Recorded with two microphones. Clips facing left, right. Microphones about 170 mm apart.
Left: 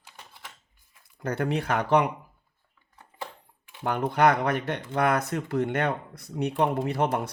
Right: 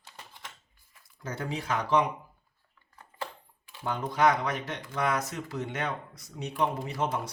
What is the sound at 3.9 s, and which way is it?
Speech, 60° left (ahead or behind).